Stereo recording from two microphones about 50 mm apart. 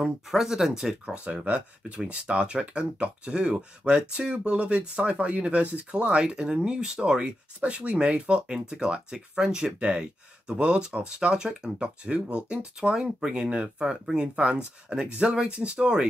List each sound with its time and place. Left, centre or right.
0.3 s speech: centre
1.0 s speech: right